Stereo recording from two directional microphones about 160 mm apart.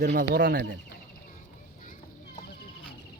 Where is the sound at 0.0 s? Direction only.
90° right.